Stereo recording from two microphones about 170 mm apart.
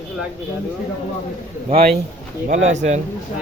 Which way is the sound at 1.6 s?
35° right (ahead or behind).